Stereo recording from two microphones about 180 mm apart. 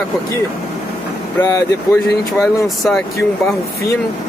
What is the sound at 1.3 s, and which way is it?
Speech, 20° left (ahead or behind).